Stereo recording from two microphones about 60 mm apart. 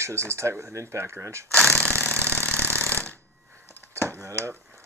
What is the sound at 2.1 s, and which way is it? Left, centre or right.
Engine, right.